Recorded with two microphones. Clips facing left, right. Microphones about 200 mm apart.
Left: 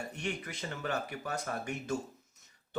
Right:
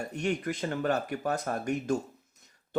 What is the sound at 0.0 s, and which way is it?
Speech, 40° right (ahead or behind).